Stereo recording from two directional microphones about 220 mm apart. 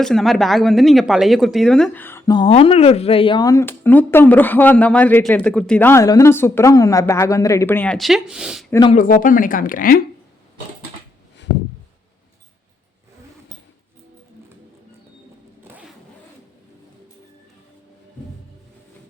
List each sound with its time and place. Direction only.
0.0 s speech: centre (ahead or behind)
8.9 s speech: 35° left (ahead or behind)